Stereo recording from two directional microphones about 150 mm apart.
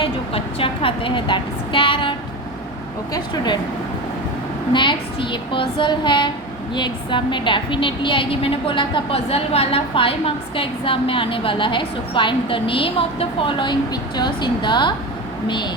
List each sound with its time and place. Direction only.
0.0 s a woman's voice: 35° left (ahead or behind)
4.7 s a woman's voice: 30° left (ahead or behind)